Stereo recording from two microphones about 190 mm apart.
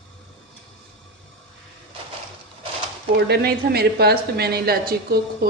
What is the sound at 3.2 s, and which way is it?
A woman's voice, 60° right (ahead or behind).